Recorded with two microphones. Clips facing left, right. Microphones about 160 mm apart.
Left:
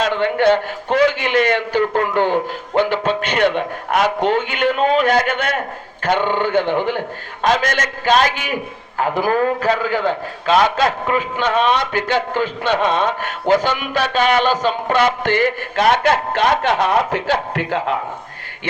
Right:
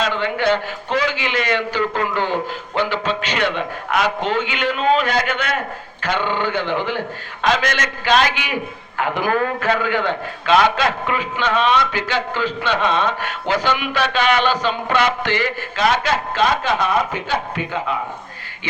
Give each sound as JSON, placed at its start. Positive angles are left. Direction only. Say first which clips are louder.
{"t": 0.0, "sound": "a man's voice", "louder": "left 4 dB", "side_deg": 55}